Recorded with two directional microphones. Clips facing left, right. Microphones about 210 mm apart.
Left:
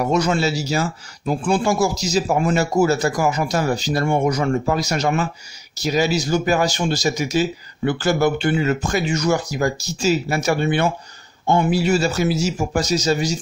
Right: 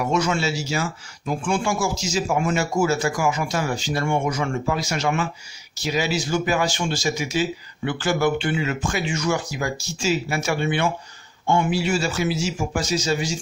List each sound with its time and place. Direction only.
0.0 s speech: 35° left (ahead or behind)